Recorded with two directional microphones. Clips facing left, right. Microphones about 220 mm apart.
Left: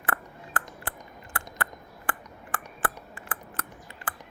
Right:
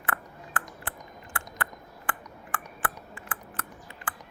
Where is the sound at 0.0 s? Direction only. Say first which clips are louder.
Left 2 dB; 40° left (ahead or behind).